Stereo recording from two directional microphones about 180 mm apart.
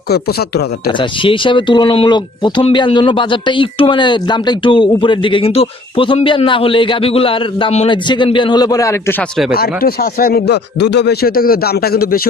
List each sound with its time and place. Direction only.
0.1 s speech: 60° left (ahead or behind)
0.9 s speech: 25° left (ahead or behind)
9.6 s speech: 55° left (ahead or behind)